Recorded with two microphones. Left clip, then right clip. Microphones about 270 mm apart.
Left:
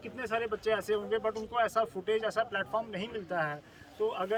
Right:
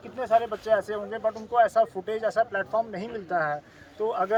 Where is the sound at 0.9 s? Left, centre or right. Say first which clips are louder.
Right 2 dB; centre.